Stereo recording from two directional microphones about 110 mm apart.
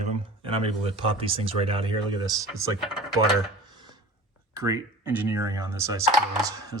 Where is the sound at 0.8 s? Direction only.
55° right (ahead or behind).